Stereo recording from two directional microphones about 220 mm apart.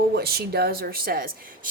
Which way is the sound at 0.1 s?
45° right (ahead or behind).